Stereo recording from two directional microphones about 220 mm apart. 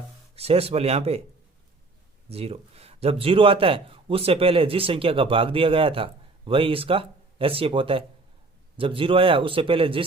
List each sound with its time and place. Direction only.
0.3 s a man's voice: 25° right (ahead or behind)
2.3 s a man's voice: 30° right (ahead or behind)